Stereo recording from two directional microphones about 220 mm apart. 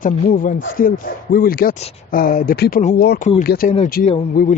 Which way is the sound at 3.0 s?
45° left (ahead or behind).